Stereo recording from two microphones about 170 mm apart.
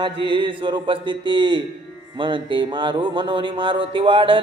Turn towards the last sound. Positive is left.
turn(degrees=-30)  # may be behind; listen again after turning